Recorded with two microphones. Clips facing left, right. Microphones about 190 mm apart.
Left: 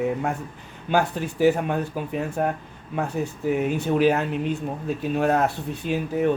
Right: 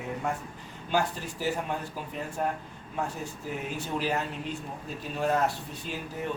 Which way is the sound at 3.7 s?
60° left (ahead or behind).